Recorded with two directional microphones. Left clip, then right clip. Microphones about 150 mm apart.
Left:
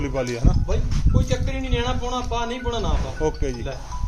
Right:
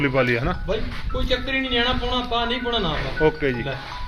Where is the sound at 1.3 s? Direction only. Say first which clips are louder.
Right 7 dB; 25° left (ahead or behind).